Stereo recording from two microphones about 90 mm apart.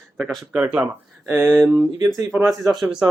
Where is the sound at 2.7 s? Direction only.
5° right (ahead or behind).